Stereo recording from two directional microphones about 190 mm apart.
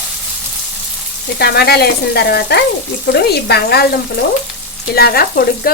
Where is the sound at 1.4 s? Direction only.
55° left (ahead or behind).